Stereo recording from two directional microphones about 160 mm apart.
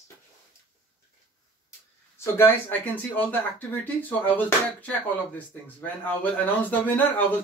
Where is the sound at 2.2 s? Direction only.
15° left (ahead or behind).